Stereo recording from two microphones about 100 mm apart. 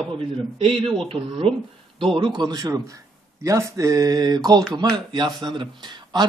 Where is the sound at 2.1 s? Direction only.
50° right (ahead or behind).